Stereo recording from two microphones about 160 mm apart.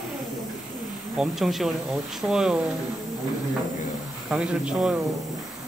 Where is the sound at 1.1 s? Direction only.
5° right (ahead or behind).